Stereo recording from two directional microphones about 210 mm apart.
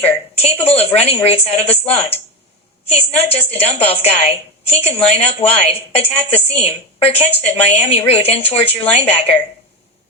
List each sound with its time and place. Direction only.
0.0 s a woman's voice: 30° left (ahead or behind)
6.1 s a woman's voice: 5° left (ahead or behind)
6.6 s a woman's voice: 30° left (ahead or behind)